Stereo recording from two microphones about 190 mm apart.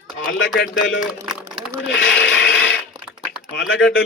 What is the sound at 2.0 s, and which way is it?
Scrape, 75° left (ahead or behind).